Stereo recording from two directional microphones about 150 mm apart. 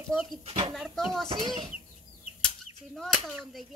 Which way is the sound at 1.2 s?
30° right (ahead or behind).